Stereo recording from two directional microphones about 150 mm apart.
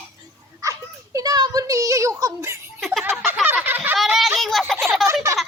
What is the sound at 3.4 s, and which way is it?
Speech, 10° right (ahead or behind).